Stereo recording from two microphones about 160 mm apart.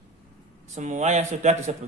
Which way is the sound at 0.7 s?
50° right (ahead or behind).